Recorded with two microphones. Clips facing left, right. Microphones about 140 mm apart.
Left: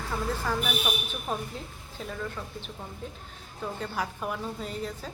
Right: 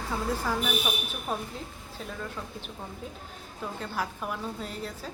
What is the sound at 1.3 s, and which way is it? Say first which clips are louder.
Speech: even; 5° right (ahead or behind).